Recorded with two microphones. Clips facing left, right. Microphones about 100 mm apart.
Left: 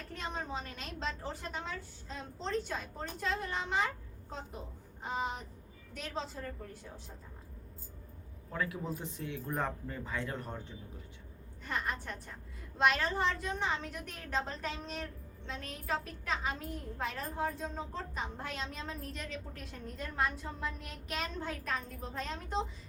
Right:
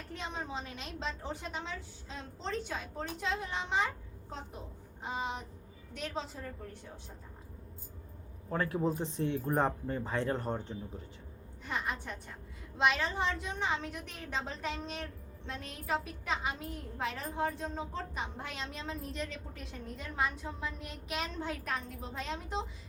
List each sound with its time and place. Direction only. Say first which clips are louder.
0.1 s a woman's voice: even; centre (ahead or behind)
8.7 s speech: right 7 dB; 35° right (ahead or behind)
11.6 s a woman's voice: even; 5° right (ahead or behind)